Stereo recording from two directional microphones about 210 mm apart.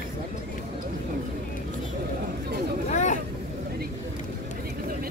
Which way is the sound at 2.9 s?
35° left (ahead or behind).